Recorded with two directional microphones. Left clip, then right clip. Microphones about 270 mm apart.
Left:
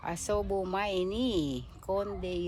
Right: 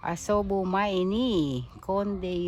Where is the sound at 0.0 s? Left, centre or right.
Right.